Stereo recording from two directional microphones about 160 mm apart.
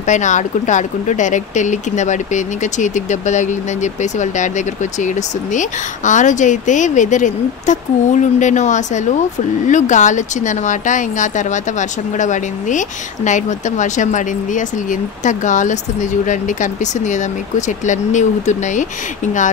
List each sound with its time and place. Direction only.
0.0 s speech: 50° left (ahead or behind)